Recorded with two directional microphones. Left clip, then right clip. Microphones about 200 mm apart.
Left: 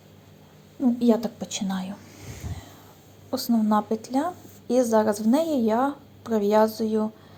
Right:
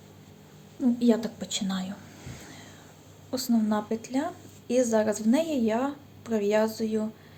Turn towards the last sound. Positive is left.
turn(degrees=15)  # may be behind; listen again after turning